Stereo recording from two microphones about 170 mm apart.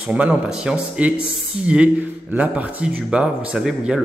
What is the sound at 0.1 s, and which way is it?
Speech, 5° right (ahead or behind).